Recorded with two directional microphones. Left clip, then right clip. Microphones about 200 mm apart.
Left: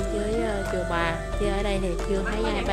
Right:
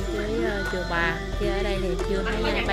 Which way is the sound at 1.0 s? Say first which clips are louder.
Right 1 dB; 10° left (ahead or behind).